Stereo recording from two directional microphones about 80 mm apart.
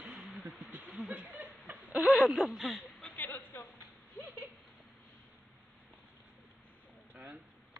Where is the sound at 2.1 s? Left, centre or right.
Centre.